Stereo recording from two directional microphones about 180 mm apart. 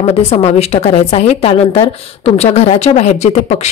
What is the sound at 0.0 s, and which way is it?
A woman's voice, 35° left (ahead or behind).